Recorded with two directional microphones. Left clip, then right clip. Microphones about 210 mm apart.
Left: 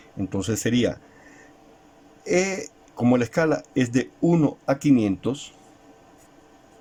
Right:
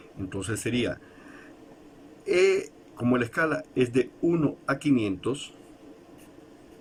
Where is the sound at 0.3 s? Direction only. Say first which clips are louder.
Left 5 dB; 30° left (ahead or behind).